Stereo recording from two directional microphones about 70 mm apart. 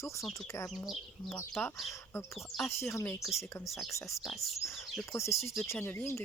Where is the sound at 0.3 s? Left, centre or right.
Left.